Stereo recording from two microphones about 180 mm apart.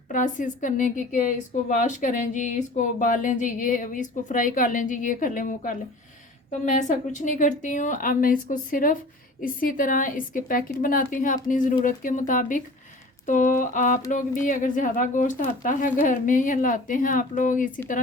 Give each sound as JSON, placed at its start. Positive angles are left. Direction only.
{"t": 0.1, "sound": "a woman's voice", "side_deg": 45}